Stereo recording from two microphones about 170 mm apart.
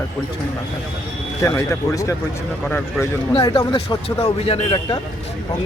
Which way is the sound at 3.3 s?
25° left (ahead or behind).